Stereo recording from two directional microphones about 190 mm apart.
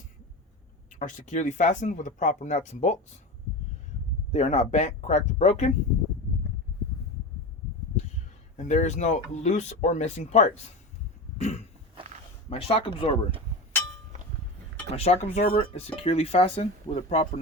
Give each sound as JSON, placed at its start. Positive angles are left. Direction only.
{"t": 0.9, "sound": "speech", "side_deg": 45}
{"t": 4.3, "sound": "speech", "side_deg": 35}
{"t": 8.5, "sound": "speech", "side_deg": 40}
{"t": 11.3, "sound": "cough", "side_deg": 35}
{"t": 12.5, "sound": "speech", "side_deg": 30}
{"t": 14.9, "sound": "speech", "side_deg": 35}